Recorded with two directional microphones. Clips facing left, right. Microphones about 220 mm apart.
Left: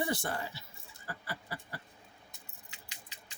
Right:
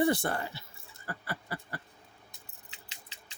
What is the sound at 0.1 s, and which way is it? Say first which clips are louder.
Speech: right 5 dB; 55° right (ahead or behind).